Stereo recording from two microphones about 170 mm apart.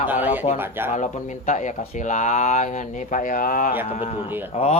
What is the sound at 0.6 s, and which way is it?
Speech, 10° right (ahead or behind).